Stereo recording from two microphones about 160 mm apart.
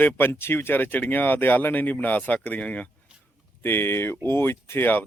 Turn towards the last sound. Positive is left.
turn(degrees=15)  # may be behind; listen again after turning